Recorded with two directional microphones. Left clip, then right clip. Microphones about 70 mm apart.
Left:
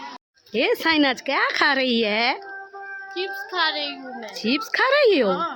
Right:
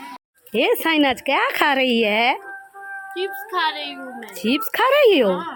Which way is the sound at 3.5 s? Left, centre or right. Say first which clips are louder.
Even; left.